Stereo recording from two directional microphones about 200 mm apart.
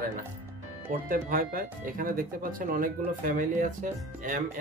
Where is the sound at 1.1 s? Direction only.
45° right (ahead or behind).